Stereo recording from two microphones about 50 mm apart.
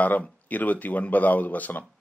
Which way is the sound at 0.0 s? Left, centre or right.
Left.